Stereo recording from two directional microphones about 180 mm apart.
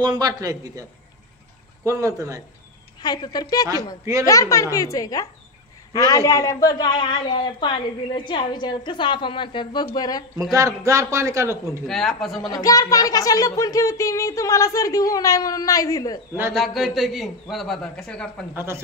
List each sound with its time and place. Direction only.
0.0 s speech: 20° right (ahead or behind)
1.9 s a man's voice: 20° right (ahead or behind)
3.0 s a man's voice: 25° left (ahead or behind)
4.0 s a man's voice: 15° right (ahead or behind)
4.3 s a woman's voice: 15° left (ahead or behind)
10.5 s a man's voice: 20° right (ahead or behind)
11.9 s a man's voice: centre (ahead or behind)
12.4 s a man's voice: 20° left (ahead or behind)
16.5 s a man's voice: centre (ahead or behind)
18.5 s a man's voice: 10° right (ahead or behind)